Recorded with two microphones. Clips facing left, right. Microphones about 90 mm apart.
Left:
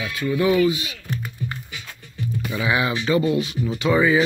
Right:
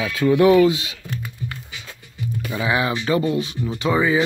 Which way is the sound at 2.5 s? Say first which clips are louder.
Right 1 dB; 35° right (ahead or behind).